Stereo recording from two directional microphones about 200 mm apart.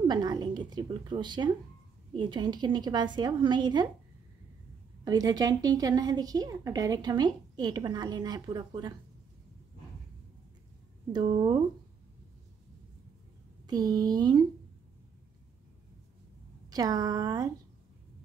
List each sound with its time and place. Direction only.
0.1 s a woman's voice: 20° right (ahead or behind)
5.0 s a woman's voice: 20° right (ahead or behind)
11.1 s a woman's voice: 20° right (ahead or behind)
13.7 s a woman's voice: 20° right (ahead or behind)
16.7 s a woman's voice: 20° right (ahead or behind)